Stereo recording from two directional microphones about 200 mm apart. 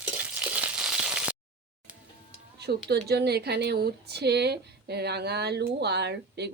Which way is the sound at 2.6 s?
55° right (ahead or behind).